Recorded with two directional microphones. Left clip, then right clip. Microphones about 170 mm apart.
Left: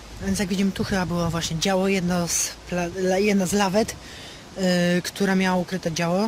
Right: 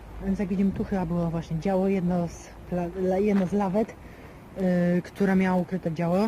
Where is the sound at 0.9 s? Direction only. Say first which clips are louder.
Left 6 dB; 35° left (ahead or behind).